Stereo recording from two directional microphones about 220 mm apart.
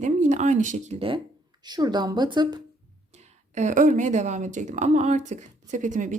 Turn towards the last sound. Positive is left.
turn(degrees=-35)  # may be behind; listen again after turning